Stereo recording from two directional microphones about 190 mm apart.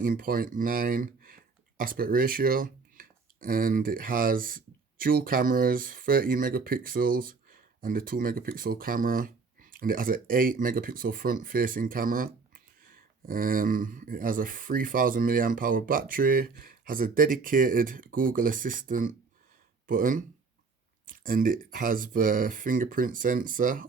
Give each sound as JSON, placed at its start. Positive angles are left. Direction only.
{"t": 0.0, "sound": "speech", "side_deg": -50}